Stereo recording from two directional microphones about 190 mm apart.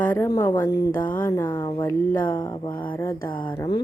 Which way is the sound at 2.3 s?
20° left (ahead or behind).